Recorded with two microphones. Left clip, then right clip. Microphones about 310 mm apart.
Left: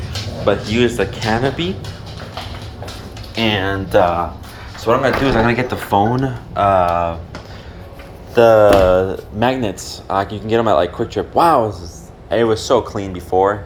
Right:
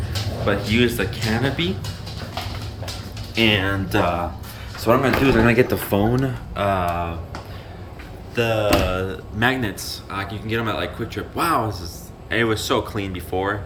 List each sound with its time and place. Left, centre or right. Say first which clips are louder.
0.4 s speech: left 4 dB; centre
3.3 s speech: left 1 dB; centre
8.4 s speech: left 11 dB; left
9.0 s speech: left 6 dB; centre
12.3 s speech: left 6 dB; centre